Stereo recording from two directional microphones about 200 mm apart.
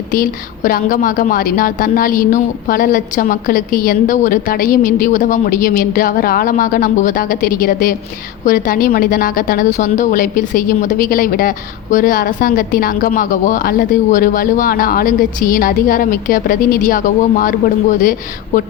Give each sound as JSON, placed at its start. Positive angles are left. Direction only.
{"t": 0.1, "sound": "a woman's voice", "side_deg": 45}